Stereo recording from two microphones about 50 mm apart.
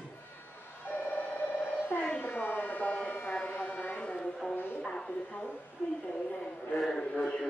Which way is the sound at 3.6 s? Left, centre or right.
Left.